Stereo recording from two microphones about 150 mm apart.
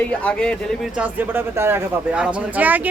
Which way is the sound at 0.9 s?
10° right (ahead or behind).